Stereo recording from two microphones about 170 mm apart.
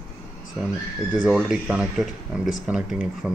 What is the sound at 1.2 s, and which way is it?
Speech, 5° right (ahead or behind).